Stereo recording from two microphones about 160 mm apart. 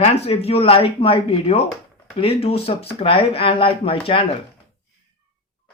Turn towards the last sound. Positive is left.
turn(degrees=35)  # may be behind; listen again after turning